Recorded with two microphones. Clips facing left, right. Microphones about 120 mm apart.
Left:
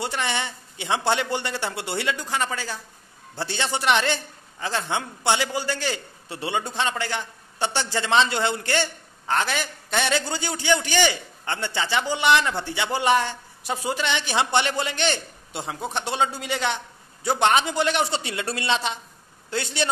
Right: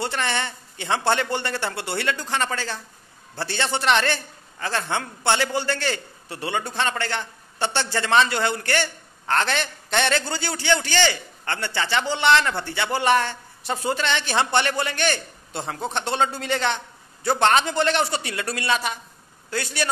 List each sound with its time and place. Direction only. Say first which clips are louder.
0.0 s a man's voice: right 1 dB; 15° left (ahead or behind)
10.1 s a man's voice: even; 15° left (ahead or behind)
18.1 s speech: even; 25° left (ahead or behind)